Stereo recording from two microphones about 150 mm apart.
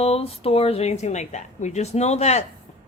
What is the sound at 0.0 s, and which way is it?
Speech, 40° left (ahead or behind).